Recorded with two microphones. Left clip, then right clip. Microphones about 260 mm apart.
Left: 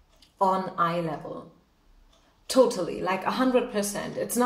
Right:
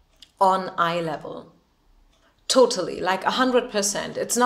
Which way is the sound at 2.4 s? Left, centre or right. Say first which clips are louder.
Right 4 dB; right.